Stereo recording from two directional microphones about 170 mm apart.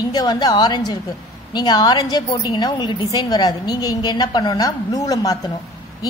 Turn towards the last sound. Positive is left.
turn(degrees=20)  # may be behind; listen again after turning